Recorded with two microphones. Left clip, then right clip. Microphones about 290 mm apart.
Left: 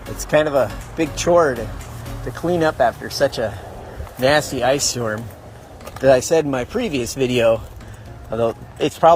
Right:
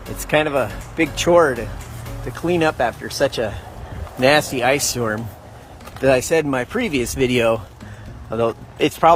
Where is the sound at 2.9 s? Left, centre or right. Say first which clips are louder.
Left 1 dB; right.